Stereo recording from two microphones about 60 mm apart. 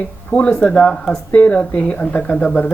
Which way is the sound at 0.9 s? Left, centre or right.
Centre.